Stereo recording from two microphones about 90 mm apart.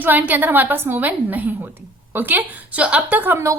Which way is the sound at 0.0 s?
20° right (ahead or behind).